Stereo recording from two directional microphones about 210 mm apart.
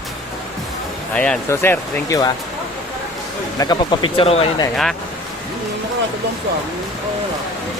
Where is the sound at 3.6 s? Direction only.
20° left (ahead or behind).